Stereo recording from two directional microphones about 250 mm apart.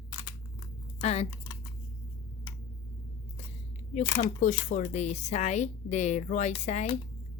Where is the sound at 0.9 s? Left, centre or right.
Left.